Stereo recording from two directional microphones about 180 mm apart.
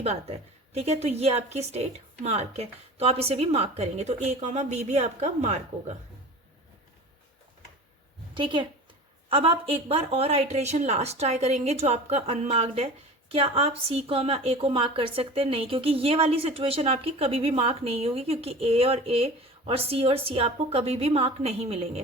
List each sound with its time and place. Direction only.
0.0 s a woman's voice: 35° right (ahead or behind)
8.4 s a woman's voice: 25° right (ahead or behind)